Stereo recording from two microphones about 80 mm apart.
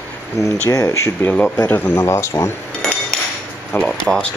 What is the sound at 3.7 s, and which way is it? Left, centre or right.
Speech, left.